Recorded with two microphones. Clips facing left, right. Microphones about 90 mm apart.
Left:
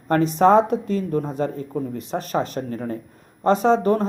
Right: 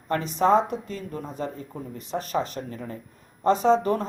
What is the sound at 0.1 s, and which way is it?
Speech, 50° left (ahead or behind).